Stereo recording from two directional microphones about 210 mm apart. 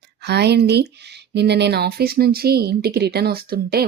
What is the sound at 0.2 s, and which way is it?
Speech, 50° right (ahead or behind).